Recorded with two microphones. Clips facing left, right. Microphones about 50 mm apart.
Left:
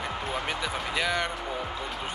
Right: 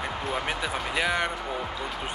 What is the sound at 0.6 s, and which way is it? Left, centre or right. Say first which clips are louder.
Speech: right 2 dB; centre.